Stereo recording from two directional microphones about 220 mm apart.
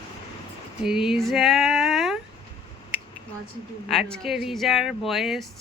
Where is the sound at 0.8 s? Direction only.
Centre (ahead or behind).